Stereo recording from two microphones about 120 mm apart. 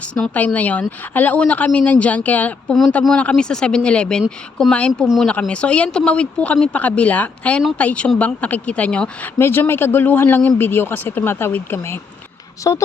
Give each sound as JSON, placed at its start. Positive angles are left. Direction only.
{"t": 0.1, "sound": "a woman's voice", "side_deg": 10}
{"t": 2.7, "sound": "a woman's voice", "side_deg": 0}
{"t": 5.3, "sound": "a woman's voice", "side_deg": 10}
{"t": 12.7, "sound": "speech", "side_deg": 30}